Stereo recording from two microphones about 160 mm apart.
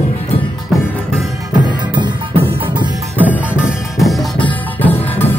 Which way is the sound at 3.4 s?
5° right (ahead or behind).